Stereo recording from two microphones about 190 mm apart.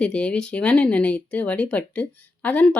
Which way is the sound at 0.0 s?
5° left (ahead or behind).